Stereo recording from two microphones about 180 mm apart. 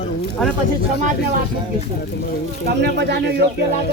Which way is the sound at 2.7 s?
65° right (ahead or behind).